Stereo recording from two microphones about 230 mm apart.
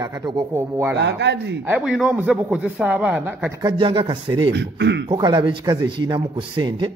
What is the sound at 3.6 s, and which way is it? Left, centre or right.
Speech, right.